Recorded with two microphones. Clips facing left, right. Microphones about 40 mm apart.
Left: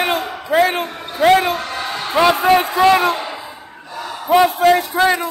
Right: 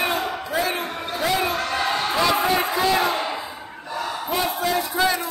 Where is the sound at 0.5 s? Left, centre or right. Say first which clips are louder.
Left 12 dB; left.